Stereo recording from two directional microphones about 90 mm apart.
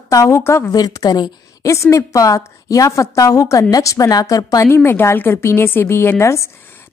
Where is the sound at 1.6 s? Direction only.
35° left (ahead or behind).